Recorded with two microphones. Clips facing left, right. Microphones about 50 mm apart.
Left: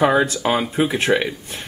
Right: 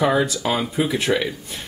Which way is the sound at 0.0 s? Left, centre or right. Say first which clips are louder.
Left 3 dB; left.